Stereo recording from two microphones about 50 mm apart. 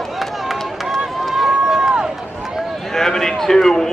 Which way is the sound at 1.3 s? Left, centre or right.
Centre.